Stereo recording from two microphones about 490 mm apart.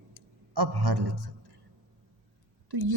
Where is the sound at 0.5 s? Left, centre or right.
Right.